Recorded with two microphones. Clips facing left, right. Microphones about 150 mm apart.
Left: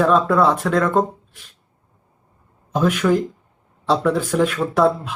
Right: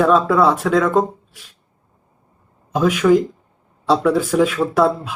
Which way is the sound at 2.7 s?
Centre (ahead or behind).